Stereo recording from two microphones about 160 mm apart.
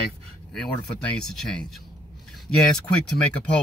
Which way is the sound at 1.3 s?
5° left (ahead or behind).